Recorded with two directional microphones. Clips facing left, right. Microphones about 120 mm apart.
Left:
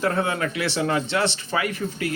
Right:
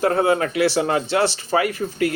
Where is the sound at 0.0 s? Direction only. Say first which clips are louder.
Right 5 dB; 35° right (ahead or behind).